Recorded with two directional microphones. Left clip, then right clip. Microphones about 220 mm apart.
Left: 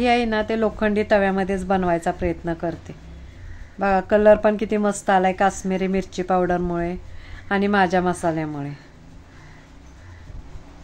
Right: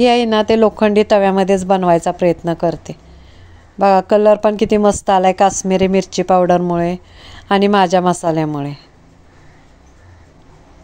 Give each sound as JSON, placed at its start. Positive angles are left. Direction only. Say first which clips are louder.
{"t": 0.0, "sound": "a woman's voice", "louder": "right 7 dB", "side_deg": -25}